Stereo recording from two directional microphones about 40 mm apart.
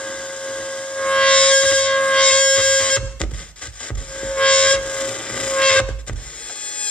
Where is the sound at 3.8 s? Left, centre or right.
Left.